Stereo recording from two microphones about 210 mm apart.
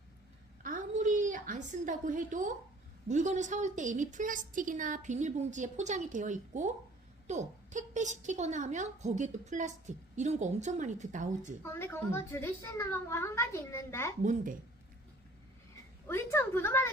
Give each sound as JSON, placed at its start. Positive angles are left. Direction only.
{"t": 0.6, "sound": "a sound", "side_deg": -40}
{"t": 3.1, "sound": "a woman's voice", "side_deg": -35}
{"t": 11.6, "sound": "a woman's voice", "side_deg": 10}
{"t": 14.2, "sound": "a woman's voice", "side_deg": -40}
{"t": 16.0, "sound": "a woman's voice", "side_deg": 10}